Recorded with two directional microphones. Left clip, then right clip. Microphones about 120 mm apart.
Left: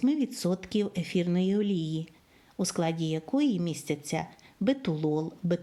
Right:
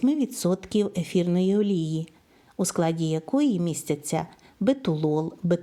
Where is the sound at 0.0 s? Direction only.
30° right (ahead or behind).